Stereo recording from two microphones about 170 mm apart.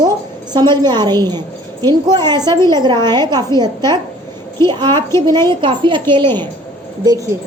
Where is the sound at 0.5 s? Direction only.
25° right (ahead or behind).